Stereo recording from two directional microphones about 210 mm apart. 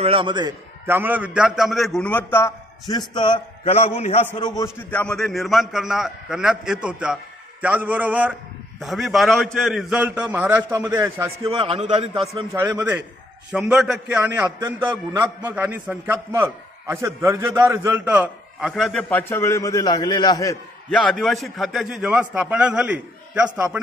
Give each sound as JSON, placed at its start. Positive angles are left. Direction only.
{"t": 0.0, "sound": "a man's voice", "side_deg": -25}
{"t": 0.8, "sound": "a man's voice", "side_deg": -10}
{"t": 3.2, "sound": "a man's voice", "side_deg": 25}
{"t": 4.4, "sound": "a man's voice", "side_deg": 20}
{"t": 4.7, "sound": "a man's voice", "side_deg": 5}
{"t": 11.4, "sound": "a man's voice", "side_deg": -25}
{"t": 12.5, "sound": "a man's voice", "side_deg": -15}
{"t": 21.0, "sound": "a man's voice", "side_deg": 5}